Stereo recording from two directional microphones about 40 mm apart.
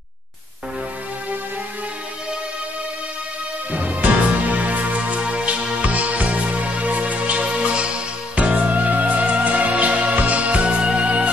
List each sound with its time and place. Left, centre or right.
3.7 s music: right